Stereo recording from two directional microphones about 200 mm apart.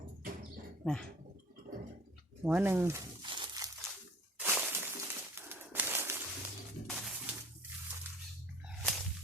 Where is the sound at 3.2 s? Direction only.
25° right (ahead or behind).